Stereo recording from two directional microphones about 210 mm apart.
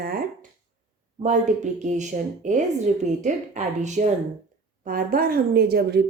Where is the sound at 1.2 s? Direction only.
35° right (ahead or behind).